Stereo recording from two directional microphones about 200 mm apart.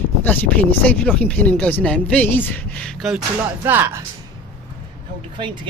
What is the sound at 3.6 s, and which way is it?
Speech, 10° right (ahead or behind).